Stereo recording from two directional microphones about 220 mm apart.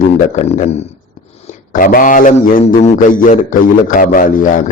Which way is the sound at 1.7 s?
40° left (ahead or behind).